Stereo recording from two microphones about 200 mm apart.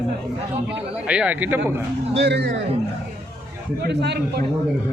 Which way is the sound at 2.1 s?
60° right (ahead or behind).